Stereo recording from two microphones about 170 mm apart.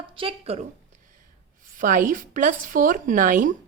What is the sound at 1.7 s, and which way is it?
Speech, 50° right (ahead or behind).